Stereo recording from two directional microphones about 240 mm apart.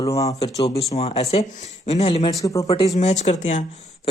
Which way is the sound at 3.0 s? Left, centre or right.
Left.